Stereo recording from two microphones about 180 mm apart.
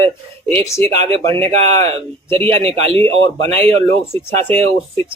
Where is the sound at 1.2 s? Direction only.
35° right (ahead or behind).